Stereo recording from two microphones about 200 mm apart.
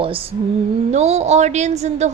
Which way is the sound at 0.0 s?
25° right (ahead or behind).